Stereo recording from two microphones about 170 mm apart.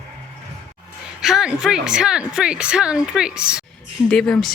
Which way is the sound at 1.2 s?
Centre (ahead or behind).